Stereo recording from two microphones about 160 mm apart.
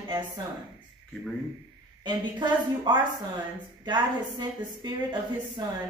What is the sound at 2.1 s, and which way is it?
A woman's voice, 25° right (ahead or behind).